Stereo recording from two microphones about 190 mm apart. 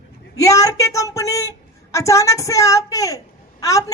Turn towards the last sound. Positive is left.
turn(degrees=15)  # may be behind; listen again after turning